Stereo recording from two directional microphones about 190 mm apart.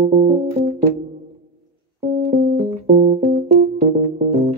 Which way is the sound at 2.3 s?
40° right (ahead or behind).